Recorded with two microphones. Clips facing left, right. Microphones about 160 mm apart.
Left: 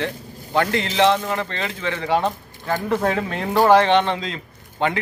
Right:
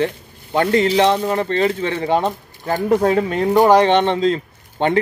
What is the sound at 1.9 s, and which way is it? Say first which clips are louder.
Speech: right 3 dB; 20° right (ahead or behind).